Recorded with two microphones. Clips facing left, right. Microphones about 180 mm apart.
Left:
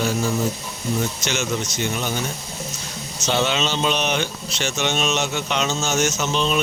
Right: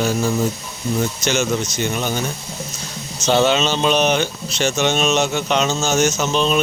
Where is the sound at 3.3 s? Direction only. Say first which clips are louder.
Right 6 dB; 45° right (ahead or behind).